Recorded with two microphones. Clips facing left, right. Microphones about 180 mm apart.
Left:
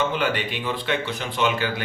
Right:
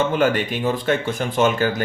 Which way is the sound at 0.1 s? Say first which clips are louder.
Right 6 dB; 45° right (ahead or behind).